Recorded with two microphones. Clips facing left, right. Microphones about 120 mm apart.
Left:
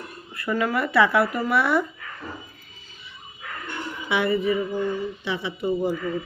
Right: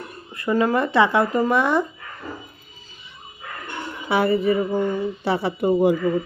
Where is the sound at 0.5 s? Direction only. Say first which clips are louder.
Right 3 dB; 30° right (ahead or behind).